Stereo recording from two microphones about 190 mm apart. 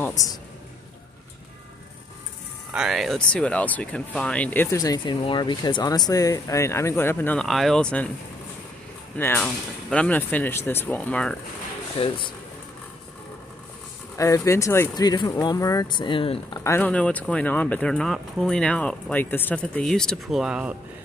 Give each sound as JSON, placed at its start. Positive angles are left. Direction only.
{"t": 0.0, "sound": "a man's voice", "side_deg": 20}
{"t": 2.7, "sound": "speech", "side_deg": 0}
{"t": 9.1, "sound": "speech", "side_deg": 10}
{"t": 12.0, "sound": "speech", "side_deg": 25}
{"t": 14.1, "sound": "speech", "side_deg": 15}
{"t": 16.6, "sound": "speech", "side_deg": 10}